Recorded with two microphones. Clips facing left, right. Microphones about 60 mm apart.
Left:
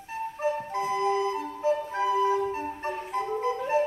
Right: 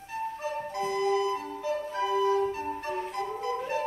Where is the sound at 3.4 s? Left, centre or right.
Left.